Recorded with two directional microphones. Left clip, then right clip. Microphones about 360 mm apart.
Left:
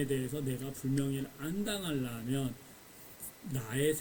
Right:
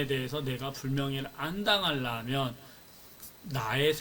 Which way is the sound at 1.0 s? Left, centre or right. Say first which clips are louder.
Right 6 dB; right.